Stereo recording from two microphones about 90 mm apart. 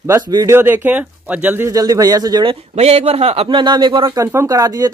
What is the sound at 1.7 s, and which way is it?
Speech, 40° right (ahead or behind).